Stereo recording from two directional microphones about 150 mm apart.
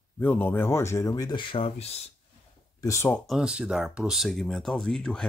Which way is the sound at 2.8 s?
20° left (ahead or behind).